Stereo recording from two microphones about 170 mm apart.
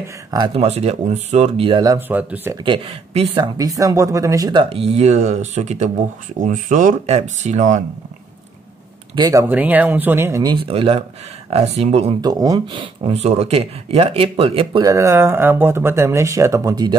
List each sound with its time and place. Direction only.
0.0 s speech: 25° right (ahead or behind)
0.6 s speech: 40° right (ahead or behind)
1.7 s speech: 20° right (ahead or behind)
2.5 s speech: 30° right (ahead or behind)
3.3 s speech: 20° right (ahead or behind); by 7.8 s 45° right (ahead or behind)
9.1 s speech: 20° right (ahead or behind)
10.7 s speech: 35° right (ahead or behind)
12.2 s speech: 20° right (ahead or behind)